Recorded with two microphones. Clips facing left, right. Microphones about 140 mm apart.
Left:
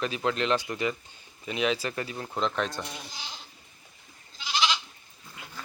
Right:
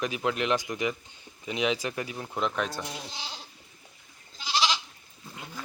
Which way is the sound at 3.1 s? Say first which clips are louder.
Right 2 dB; 30° right (ahead or behind).